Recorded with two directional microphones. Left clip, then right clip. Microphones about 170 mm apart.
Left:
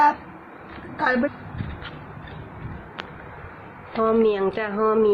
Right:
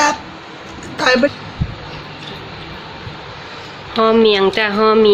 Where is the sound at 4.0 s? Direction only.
10° right (ahead or behind).